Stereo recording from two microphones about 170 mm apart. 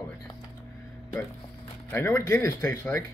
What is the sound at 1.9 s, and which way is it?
Speech, 15° left (ahead or behind).